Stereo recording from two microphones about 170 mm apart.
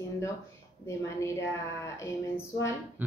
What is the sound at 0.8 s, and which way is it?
A woman's voice, 15° left (ahead or behind).